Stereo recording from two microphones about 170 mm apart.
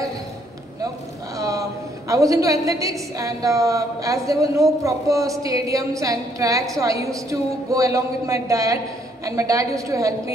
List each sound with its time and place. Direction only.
1.4 s a woman's voice: 20° right (ahead or behind)